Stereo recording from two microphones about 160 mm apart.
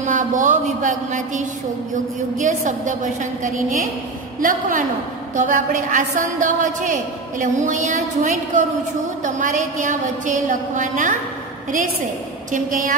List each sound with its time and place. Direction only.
0.0 s a sound: 50° right (ahead or behind)
2.3 s a woman's voice: 50° right (ahead or behind)
12.4 s a woman's voice: 55° right (ahead or behind)